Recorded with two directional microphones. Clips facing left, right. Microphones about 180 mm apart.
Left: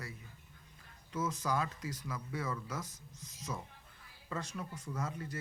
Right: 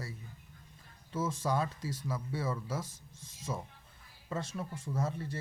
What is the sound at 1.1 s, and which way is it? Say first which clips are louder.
A man's voice: right 2 dB; 30° right (ahead or behind).